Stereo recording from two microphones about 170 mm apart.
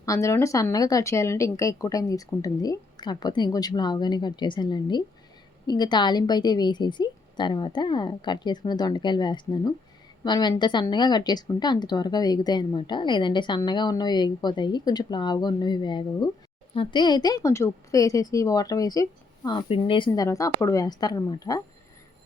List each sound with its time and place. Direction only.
0.0 s speech: 20° left (ahead or behind)